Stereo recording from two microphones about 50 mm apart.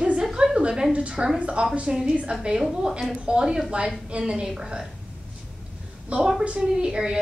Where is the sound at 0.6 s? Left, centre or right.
Centre.